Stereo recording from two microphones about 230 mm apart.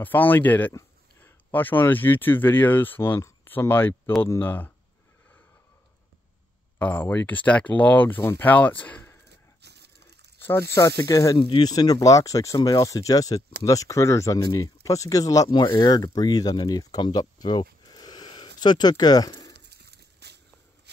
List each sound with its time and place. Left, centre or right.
0.0 s speech: centre
6.8 s speech: centre
9.6 s crushing: right
10.7 s speech: centre
17.8 s a sound: centre
18.6 s speech: centre
19.6 s a sound: right